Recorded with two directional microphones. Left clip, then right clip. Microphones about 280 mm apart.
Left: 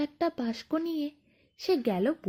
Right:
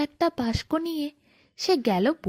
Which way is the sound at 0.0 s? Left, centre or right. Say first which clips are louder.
Right 5 dB; right.